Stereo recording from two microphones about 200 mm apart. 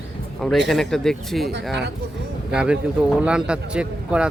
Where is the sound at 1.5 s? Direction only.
60° right (ahead or behind).